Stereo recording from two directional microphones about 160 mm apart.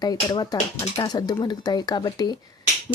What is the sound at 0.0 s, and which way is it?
Speech, 25° left (ahead or behind).